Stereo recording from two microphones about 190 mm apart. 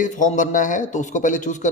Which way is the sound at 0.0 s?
40° left (ahead or behind).